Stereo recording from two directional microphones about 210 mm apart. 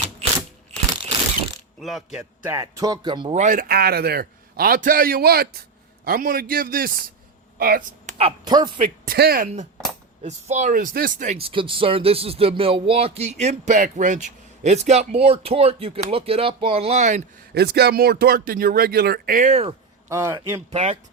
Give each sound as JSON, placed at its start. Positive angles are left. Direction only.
{"t": 1.8, "sound": "speech", "side_deg": 0}
{"t": 2.1, "sound": "a man's voice", "side_deg": -10}
{"t": 3.3, "sound": "a man's voice", "side_deg": -40}
{"t": 8.2, "sound": "speech", "side_deg": -20}
{"t": 9.0, "sound": "speech", "side_deg": -45}
{"t": 10.2, "sound": "a man's voice", "side_deg": -35}
{"t": 17.5, "sound": "a man's voice", "side_deg": -50}
{"t": 20.1, "sound": "a man's voice", "side_deg": -10}
{"t": 20.7, "sound": "a man's voice", "side_deg": -30}